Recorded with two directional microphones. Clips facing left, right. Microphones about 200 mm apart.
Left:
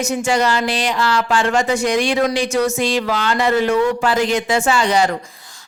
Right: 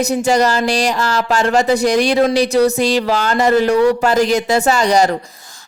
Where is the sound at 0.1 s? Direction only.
40° right (ahead or behind).